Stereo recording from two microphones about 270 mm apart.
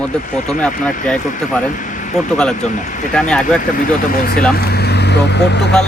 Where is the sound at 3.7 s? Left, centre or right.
Left.